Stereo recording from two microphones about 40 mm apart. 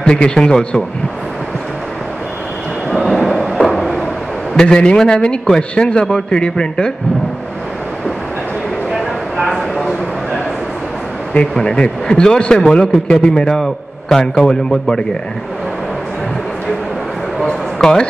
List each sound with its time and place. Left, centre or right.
0.0 s a man's voice: left
2.9 s a sound: centre
4.6 s a man's voice: left
9.5 s a sound: centre
11.6 s a man's voice: left
17.7 s speech: centre